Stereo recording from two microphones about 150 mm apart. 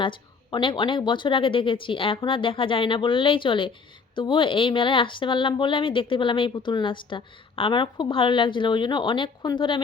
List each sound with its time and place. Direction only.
0.0 s speech: 35° left (ahead or behind)